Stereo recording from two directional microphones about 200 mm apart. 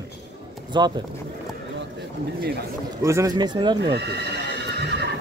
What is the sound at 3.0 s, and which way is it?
Speech, 15° right (ahead or behind).